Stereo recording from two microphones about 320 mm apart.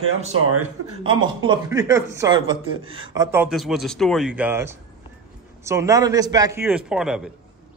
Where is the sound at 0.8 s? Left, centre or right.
Right.